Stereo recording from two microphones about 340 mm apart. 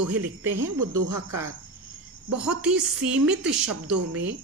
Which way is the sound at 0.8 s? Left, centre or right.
Right.